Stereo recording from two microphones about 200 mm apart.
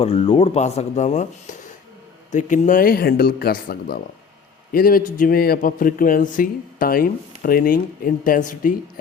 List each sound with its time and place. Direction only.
0.0 s a man's voice: 30° left (ahead or behind)